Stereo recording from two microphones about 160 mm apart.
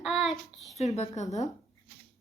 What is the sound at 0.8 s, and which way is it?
Speech, 45° left (ahead or behind).